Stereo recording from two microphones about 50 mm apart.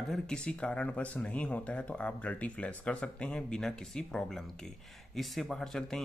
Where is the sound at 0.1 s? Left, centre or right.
Centre.